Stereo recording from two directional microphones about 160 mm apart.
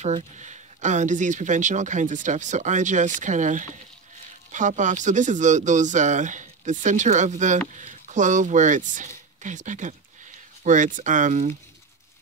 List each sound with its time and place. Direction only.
0.0 s speech: 45° right (ahead or behind)